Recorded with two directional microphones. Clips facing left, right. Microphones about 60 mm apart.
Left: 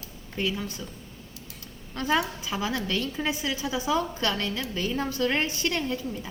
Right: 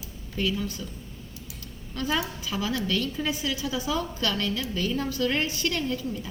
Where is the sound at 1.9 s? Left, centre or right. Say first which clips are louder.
Left 3 dB; left.